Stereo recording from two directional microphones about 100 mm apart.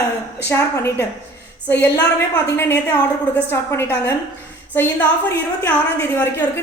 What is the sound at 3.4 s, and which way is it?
Speech, 20° left (ahead or behind).